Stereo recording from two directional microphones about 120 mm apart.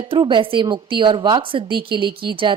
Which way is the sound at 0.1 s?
40° right (ahead or behind).